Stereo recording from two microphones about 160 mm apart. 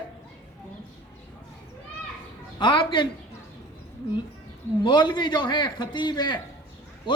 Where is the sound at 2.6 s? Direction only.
30° left (ahead or behind).